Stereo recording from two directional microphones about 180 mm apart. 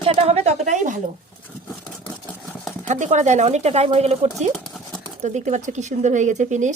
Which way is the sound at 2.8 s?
40° right (ahead or behind).